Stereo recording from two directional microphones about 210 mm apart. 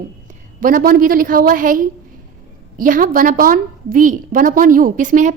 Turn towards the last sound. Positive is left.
turn(degrees=-35)  # may be behind; listen again after turning